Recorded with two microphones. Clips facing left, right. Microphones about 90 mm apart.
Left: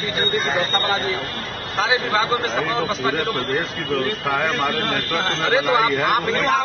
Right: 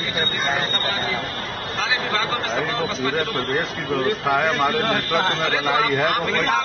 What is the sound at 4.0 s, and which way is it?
Speech, 15° right (ahead or behind).